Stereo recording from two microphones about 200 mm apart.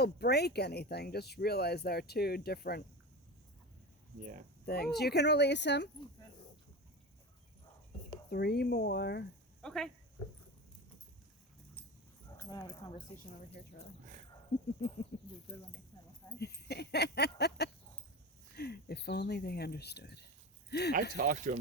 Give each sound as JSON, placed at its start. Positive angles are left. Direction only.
{"t": 0.0, "sound": "speech", "side_deg": 55}
{"t": 4.2, "sound": "speech", "side_deg": -40}
{"t": 4.6, "sound": "speech", "side_deg": 50}
{"t": 8.3, "sound": "speech", "side_deg": 55}
{"t": 9.6, "sound": "speech", "side_deg": 5}
{"t": 12.4, "sound": "speech", "side_deg": 15}
{"t": 13.1, "sound": "a woman's voice", "side_deg": 30}
{"t": 14.8, "sound": "speech", "side_deg": 55}
{"t": 16.4, "sound": "speech", "side_deg": 55}
{"t": 21.2, "sound": "speech", "side_deg": -45}